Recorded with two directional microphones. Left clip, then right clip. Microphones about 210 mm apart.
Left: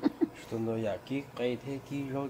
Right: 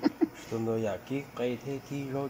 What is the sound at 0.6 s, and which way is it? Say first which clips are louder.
Speech: right 2 dB; 20° right (ahead or behind).